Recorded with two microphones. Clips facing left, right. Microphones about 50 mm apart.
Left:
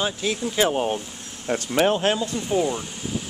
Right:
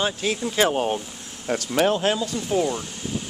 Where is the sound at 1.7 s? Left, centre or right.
Left.